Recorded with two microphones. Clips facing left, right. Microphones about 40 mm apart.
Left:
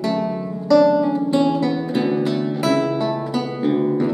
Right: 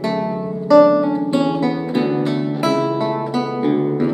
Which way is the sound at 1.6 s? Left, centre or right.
Centre.